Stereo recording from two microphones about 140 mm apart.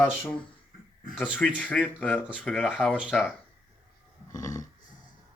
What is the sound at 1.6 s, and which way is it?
Speech, 10° left (ahead or behind).